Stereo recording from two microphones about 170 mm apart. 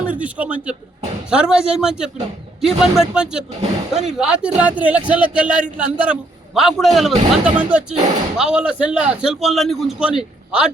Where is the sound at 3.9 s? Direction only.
45° right (ahead or behind).